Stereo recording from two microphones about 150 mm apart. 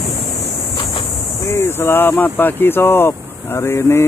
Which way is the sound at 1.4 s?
15° left (ahead or behind).